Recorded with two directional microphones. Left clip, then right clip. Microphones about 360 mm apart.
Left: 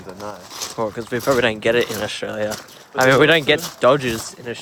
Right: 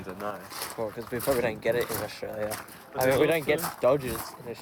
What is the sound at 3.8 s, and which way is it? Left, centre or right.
Speech, left.